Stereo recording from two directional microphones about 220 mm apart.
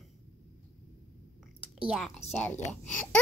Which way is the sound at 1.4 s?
5° right (ahead or behind).